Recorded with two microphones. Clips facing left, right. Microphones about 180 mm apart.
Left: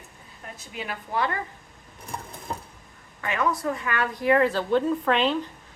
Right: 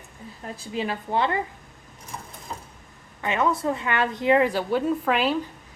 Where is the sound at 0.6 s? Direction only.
30° right (ahead or behind).